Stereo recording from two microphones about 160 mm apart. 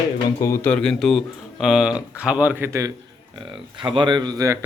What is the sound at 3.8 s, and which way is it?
Speech, 30° right (ahead or behind).